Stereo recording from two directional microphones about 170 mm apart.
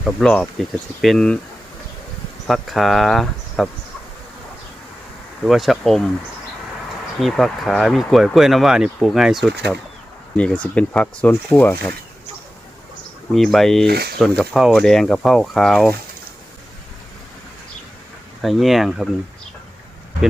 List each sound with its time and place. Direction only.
0.0 s speech: 5° left (ahead or behind)
2.5 s speech: centre (ahead or behind)
5.5 s speech: centre (ahead or behind)
7.2 s speech: centre (ahead or behind)
13.3 s speech: centre (ahead or behind)
13.8 s speech: 70° right (ahead or behind)
14.2 s speech: centre (ahead or behind)
18.4 s speech: centre (ahead or behind)